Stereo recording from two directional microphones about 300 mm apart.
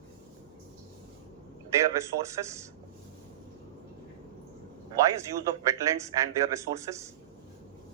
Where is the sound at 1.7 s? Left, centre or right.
Centre.